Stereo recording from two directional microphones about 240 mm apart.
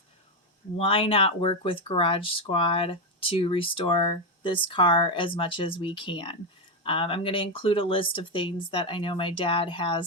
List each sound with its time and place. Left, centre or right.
0.8 s speech: left